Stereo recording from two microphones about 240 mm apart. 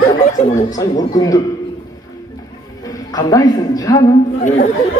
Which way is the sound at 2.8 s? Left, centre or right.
Centre.